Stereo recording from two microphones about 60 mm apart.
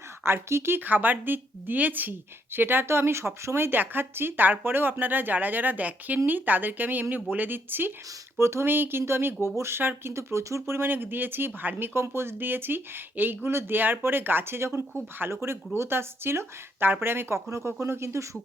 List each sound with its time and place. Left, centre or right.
0.4 s speech: right
8.4 s speech: right
11.9 s speech: right